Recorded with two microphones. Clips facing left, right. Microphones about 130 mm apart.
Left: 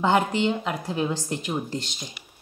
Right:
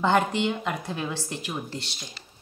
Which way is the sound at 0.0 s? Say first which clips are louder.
Left 1 dB; 10° left (ahead or behind).